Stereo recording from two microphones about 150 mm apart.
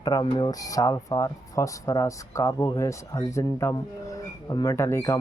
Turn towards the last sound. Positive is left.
turn(degrees=20)  # may be behind; listen again after turning